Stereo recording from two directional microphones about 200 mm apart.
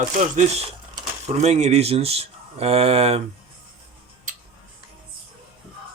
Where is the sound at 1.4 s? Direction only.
35° right (ahead or behind).